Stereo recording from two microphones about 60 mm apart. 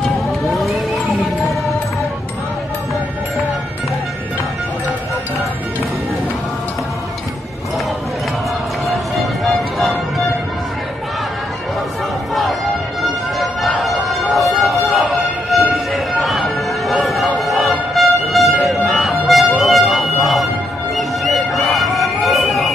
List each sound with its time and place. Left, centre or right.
0.5 s music: centre
8.8 s music: centre
13.0 s music: centre
15.7 s a sound: centre